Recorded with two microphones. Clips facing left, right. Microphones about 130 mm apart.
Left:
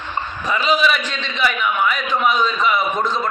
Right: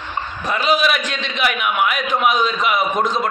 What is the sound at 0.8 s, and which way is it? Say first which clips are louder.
Speech: even; 65° right (ahead or behind).